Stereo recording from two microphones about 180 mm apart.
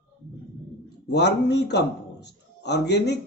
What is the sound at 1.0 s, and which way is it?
A man's voice, 70° left (ahead or behind).